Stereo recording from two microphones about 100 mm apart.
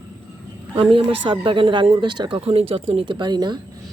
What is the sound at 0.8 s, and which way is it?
Speech, 65° right (ahead or behind).